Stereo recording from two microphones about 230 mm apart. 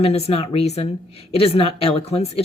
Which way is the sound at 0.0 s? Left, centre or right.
Left.